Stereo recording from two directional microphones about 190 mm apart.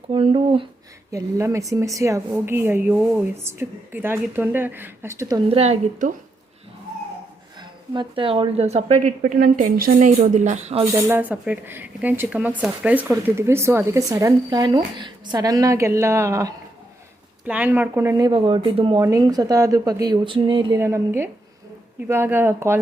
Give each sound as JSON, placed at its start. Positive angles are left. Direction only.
{"t": 0.1, "sound": "speech", "side_deg": -30}
{"t": 1.1, "sound": "a woman's voice", "side_deg": -15}
{"t": 5.5, "sound": "a woman's voice", "side_deg": -35}
{"t": 7.6, "sound": "a woman's voice", "side_deg": -25}
{"t": 10.9, "sound": "a woman's voice", "side_deg": -10}